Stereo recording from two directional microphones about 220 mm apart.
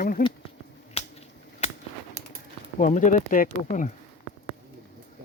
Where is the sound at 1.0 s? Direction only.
25° left (ahead or behind).